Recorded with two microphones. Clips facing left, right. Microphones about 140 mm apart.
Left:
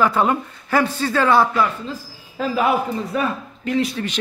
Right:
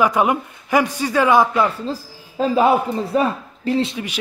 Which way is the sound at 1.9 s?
30° right (ahead or behind).